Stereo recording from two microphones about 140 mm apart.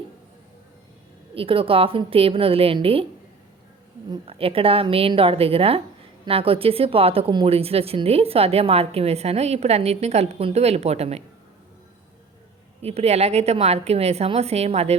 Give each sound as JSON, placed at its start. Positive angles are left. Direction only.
{"t": 1.4, "sound": "a woman's voice", "side_deg": -40}
{"t": 4.1, "sound": "a woman's voice", "side_deg": -40}
{"t": 12.8, "sound": "speech", "side_deg": -50}